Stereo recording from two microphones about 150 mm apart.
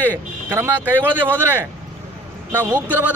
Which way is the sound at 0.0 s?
15° right (ahead or behind).